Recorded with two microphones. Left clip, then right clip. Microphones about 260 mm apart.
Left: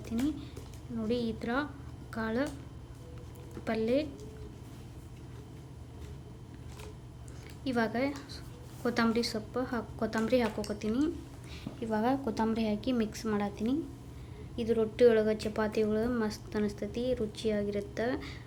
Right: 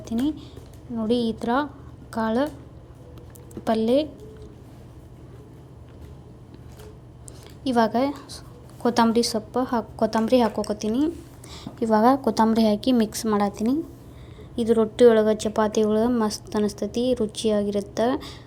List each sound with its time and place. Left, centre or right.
0.0 s a woman's voice: centre
3.6 s a woman's voice: centre
7.6 s a woman's voice: centre